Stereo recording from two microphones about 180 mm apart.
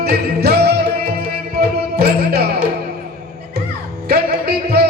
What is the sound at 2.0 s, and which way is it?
Music, 60° right (ahead or behind).